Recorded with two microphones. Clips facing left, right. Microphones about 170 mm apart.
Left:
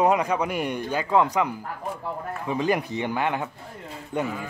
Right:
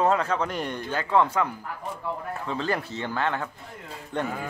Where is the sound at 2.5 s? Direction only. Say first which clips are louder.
Left 5 dB; 15° left (ahead or behind).